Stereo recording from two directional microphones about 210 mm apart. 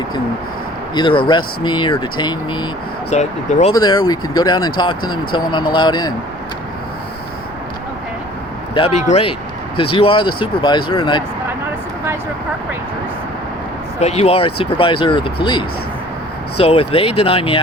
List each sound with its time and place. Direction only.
0.9 s speech: 25° left (ahead or behind)
3.1 s speech: 30° left (ahead or behind)
3.7 s speech: 20° left (ahead or behind)
8.7 s speech: 30° left (ahead or behind)
14.0 s speech: 30° left (ahead or behind)
16.6 s speech: 25° left (ahead or behind)